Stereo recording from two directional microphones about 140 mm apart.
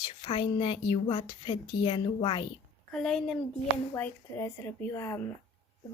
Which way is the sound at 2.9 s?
5° left (ahead or behind).